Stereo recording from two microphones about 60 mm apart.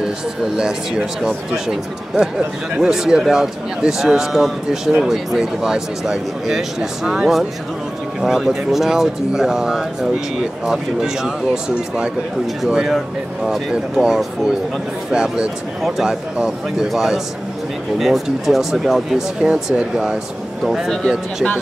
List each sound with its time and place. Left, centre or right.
0.6 s speech: centre
19.4 s speech: centre
20.6 s speech: centre